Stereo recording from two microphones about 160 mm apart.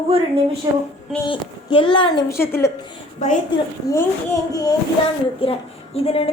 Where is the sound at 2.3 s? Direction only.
15° left (ahead or behind).